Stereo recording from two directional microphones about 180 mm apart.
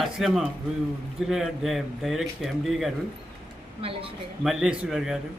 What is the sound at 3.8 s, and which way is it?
Speech, 30° right (ahead or behind).